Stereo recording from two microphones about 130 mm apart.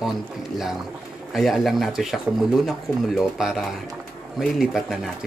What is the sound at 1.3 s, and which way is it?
Speech, centre (ahead or behind).